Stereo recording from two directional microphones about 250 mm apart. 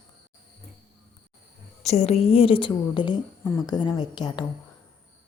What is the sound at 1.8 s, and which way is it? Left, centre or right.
A woman's voice, left.